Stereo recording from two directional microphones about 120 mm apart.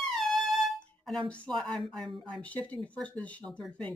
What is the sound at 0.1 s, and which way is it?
Music, centre (ahead or behind).